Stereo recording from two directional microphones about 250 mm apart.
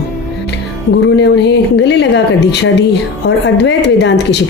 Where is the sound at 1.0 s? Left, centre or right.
Left.